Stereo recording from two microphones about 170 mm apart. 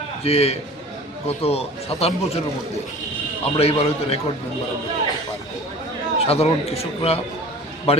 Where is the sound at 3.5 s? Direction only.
35° left (ahead or behind).